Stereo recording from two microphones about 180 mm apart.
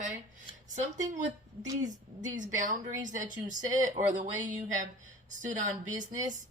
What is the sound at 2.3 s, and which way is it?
Speech, 45° right (ahead or behind).